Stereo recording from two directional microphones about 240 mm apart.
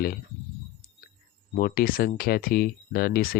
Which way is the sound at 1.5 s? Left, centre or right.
Left.